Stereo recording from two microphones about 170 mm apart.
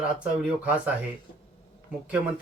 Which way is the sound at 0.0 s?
5° right (ahead or behind).